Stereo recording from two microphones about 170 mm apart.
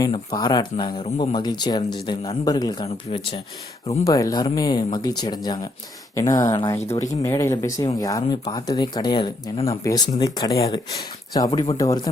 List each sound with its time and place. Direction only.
0.3 s speech: 25° left (ahead or behind)
4.0 s speech: 20° left (ahead or behind)